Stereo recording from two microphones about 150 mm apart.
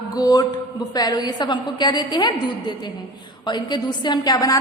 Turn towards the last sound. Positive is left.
turn(degrees=25)  # may be behind; listen again after turning